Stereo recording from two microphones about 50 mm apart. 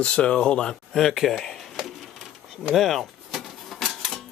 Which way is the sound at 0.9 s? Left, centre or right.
Centre.